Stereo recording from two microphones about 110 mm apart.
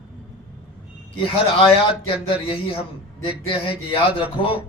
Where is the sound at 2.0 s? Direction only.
55° left (ahead or behind).